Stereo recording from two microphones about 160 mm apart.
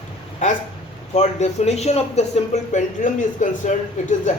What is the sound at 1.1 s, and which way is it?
Speech, 45° left (ahead or behind).